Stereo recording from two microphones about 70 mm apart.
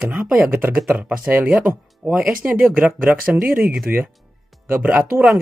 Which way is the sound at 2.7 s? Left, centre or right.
Right.